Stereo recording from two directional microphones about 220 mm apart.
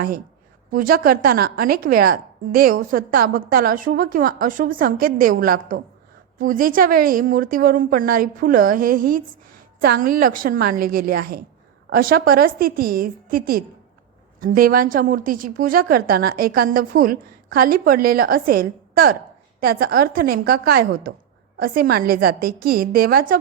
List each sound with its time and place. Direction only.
0.7 s a woman's voice: 40° right (ahead or behind)